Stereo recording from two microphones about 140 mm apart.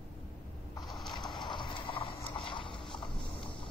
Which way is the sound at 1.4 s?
35° left (ahead or behind).